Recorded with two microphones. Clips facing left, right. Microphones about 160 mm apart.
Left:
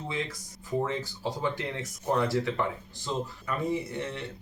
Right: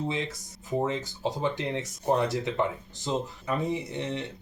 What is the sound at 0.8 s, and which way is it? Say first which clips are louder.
Speech: right 2 dB; 25° right (ahead or behind).